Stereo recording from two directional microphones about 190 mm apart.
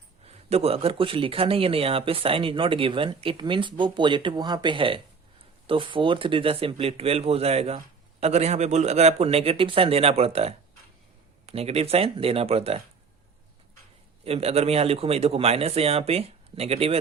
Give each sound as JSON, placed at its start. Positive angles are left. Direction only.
{"t": 0.3, "sound": "speech", "side_deg": -30}
{"t": 14.3, "sound": "speech", "side_deg": -30}